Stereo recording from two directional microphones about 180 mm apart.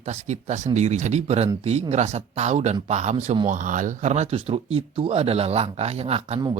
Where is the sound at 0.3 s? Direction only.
40° right (ahead or behind).